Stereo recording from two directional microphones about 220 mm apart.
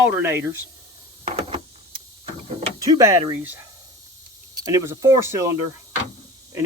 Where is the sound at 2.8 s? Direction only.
15° right (ahead or behind).